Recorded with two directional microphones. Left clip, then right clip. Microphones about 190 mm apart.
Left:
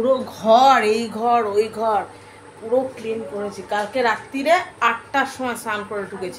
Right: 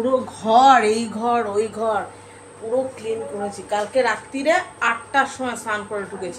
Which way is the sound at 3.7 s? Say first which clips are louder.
Even; 25° left (ahead or behind).